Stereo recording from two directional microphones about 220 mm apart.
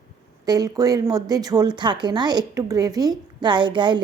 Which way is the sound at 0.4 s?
15° right (ahead or behind).